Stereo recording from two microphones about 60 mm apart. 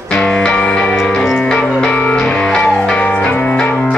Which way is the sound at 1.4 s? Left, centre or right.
Centre.